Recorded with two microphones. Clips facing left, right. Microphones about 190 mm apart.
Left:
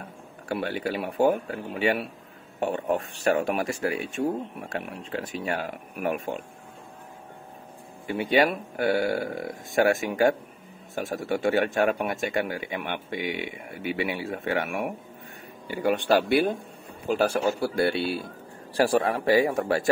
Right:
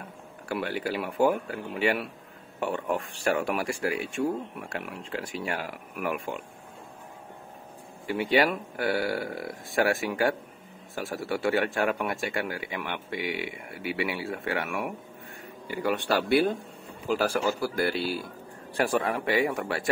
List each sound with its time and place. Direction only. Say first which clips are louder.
0.5 s speech: left 2 dB; 25° left (ahead or behind)
8.1 s speech: left 2 dB; 20° left (ahead or behind)
14.5 s speech: left 4 dB; 30° left (ahead or behind)
15.7 s speech: left 4 dB; 20° left (ahead or behind)